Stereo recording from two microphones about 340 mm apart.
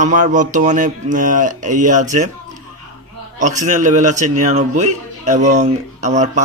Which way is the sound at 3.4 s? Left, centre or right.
Right.